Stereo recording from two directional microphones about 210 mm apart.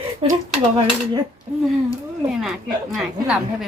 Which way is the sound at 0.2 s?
25° right (ahead or behind).